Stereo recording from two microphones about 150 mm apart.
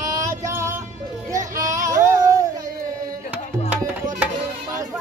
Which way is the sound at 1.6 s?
20° right (ahead or behind).